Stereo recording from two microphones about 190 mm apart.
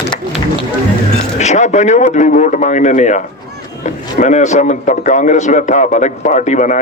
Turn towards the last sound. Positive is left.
turn(degrees=40)  # may be behind; listen again after turning